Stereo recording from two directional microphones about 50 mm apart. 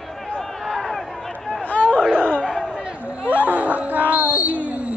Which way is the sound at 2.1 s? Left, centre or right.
Right.